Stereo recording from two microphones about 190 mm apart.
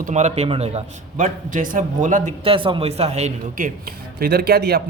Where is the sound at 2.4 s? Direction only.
30° right (ahead or behind).